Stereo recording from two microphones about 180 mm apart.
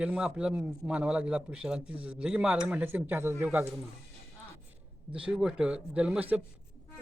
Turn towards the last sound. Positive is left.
turn(degrees=-5)  # may be behind; listen again after turning